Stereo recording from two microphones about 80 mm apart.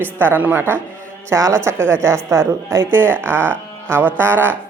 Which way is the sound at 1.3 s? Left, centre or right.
Right.